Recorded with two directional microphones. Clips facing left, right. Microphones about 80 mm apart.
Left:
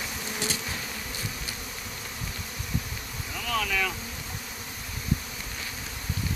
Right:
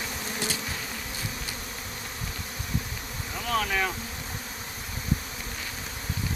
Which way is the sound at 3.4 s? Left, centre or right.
Right.